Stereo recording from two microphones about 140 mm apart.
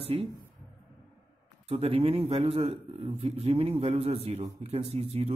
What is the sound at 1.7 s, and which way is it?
Speech, 45° right (ahead or behind).